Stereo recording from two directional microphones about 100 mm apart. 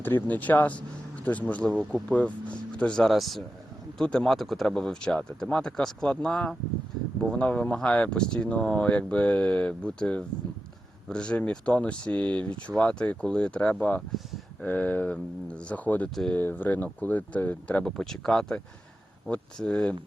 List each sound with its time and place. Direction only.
0.0 s speech: 20° left (ahead or behind)